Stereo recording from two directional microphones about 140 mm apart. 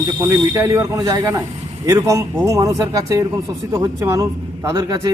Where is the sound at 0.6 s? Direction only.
25° right (ahead or behind).